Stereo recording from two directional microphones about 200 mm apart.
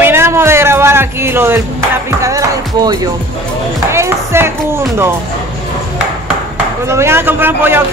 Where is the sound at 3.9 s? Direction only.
15° right (ahead or behind).